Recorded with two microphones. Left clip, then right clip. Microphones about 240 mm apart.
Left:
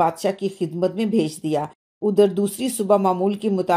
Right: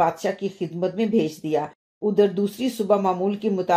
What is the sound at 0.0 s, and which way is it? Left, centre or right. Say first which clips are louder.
Speech: left 2 dB; left.